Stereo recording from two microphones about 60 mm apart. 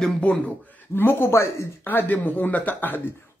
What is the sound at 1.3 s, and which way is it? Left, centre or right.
Speech, left.